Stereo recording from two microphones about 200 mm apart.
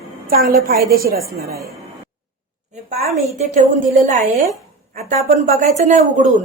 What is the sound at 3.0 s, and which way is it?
A woman's voice, 35° right (ahead or behind).